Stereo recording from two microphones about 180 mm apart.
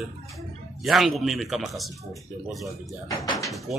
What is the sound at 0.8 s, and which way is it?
Speech, centre (ahead or behind).